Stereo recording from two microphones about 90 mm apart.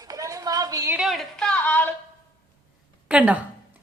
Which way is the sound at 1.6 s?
20° left (ahead or behind).